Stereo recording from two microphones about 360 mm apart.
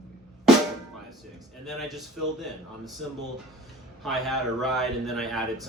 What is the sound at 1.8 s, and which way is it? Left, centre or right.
Speech, centre.